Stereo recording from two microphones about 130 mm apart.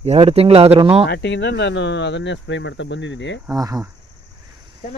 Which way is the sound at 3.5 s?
25° right (ahead or behind).